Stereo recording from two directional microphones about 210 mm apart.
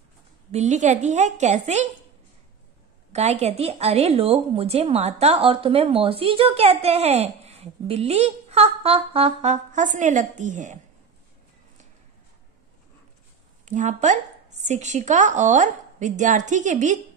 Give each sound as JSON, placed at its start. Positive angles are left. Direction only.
{"t": 0.5, "sound": "speech", "side_deg": -35}
{"t": 3.1, "sound": "a woman's voice", "side_deg": -30}
{"t": 13.7, "sound": "speech", "side_deg": -35}